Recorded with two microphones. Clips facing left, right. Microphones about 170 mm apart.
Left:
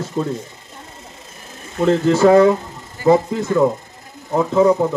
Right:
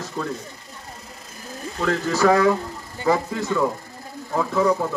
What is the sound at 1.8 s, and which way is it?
Speech, 25° left (ahead or behind).